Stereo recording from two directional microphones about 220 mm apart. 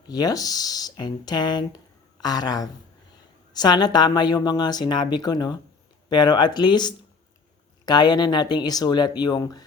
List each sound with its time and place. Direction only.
0.1 s speech: 15° left (ahead or behind)